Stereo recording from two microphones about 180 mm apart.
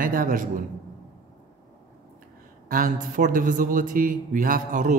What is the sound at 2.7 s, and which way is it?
A man's voice, 50° right (ahead or behind).